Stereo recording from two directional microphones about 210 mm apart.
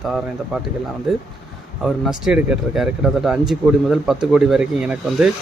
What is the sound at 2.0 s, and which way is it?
Speech, 5° right (ahead or behind).